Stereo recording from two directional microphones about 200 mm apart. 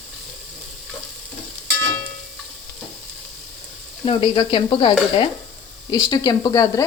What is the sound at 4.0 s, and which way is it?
Speech, 25° left (ahead or behind).